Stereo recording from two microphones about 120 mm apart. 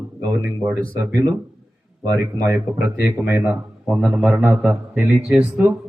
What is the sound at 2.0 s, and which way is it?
A man's voice, 30° right (ahead or behind).